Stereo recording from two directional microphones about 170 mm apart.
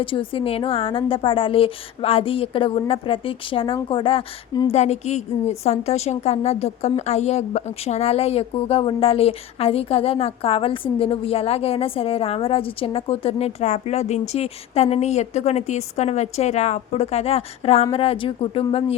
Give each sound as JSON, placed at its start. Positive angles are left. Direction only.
{"t": 0.0, "sound": "a woman's voice", "side_deg": 30}